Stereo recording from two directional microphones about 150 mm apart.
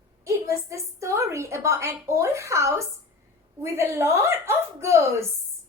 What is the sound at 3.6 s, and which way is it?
Speech, 15° right (ahead or behind).